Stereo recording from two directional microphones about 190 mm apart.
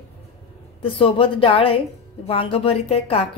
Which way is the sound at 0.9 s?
30° left (ahead or behind).